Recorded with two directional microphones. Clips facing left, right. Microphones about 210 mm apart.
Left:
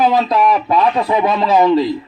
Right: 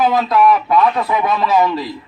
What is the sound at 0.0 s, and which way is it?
A man's voice, 25° left (ahead or behind).